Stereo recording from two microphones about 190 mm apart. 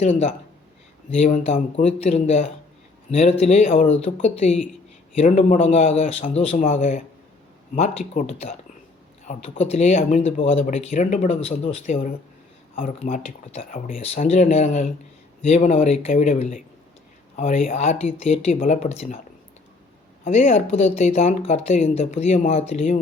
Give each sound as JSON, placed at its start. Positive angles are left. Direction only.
{"t": 0.0, "sound": "speech", "side_deg": 35}
{"t": 20.2, "sound": "speech", "side_deg": 40}